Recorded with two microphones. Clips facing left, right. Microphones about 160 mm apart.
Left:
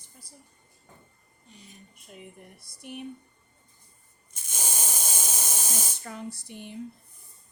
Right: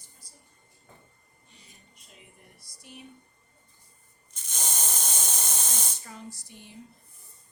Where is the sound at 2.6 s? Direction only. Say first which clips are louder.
Left 9 dB; 60° left (ahead or behind).